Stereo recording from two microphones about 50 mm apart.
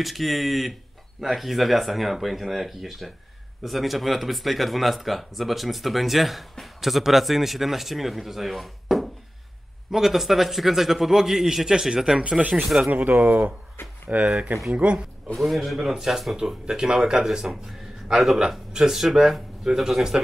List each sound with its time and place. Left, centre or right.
0.0 s a man's voice: centre
12.2 s speech: right
15.3 s a man's voice: centre